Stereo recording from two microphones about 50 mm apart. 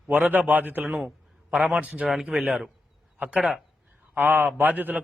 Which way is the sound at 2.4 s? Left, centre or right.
Centre.